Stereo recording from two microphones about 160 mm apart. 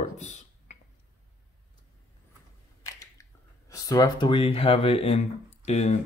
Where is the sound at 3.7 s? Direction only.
20° left (ahead or behind).